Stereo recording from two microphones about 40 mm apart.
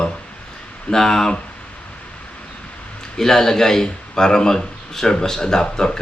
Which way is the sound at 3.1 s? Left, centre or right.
Centre.